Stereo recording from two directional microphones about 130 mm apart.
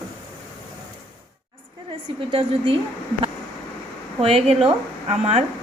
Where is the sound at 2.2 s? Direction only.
40° right (ahead or behind).